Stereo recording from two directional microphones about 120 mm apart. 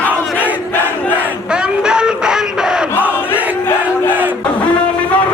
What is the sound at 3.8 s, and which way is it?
Battle cry, 15° right (ahead or behind).